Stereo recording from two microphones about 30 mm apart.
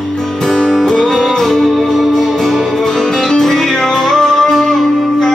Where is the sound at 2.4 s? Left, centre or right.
Centre.